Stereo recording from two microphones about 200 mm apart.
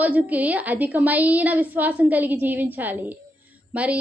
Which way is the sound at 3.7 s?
5° right (ahead or behind).